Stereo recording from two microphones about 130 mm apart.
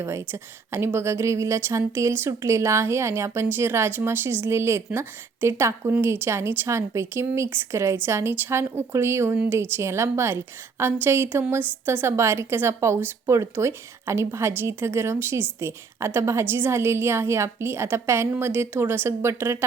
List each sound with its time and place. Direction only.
0.0 s a woman's voice: 20° right (ahead or behind)